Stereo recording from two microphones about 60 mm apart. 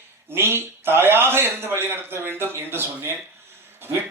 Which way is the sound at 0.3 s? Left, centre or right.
Right.